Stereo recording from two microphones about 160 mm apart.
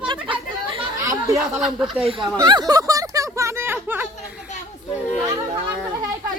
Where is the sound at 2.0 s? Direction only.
35° right (ahead or behind).